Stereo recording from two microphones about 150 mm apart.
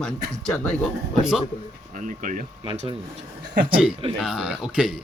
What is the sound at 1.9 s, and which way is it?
Speech, 60° right (ahead or behind).